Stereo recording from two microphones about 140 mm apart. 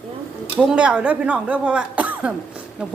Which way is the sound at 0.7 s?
10° right (ahead or behind).